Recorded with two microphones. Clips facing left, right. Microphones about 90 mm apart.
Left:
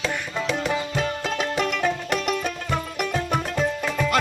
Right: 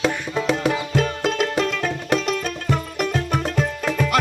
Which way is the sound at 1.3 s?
15° left (ahead or behind).